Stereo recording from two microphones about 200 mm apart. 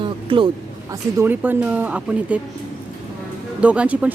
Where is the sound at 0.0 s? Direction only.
25° right (ahead or behind).